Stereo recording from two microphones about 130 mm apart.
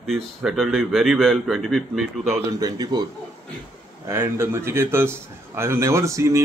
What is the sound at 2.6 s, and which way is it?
Speech, 30° right (ahead or behind).